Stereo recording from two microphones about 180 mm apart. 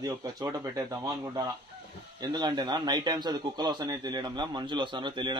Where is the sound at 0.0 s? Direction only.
15° right (ahead or behind).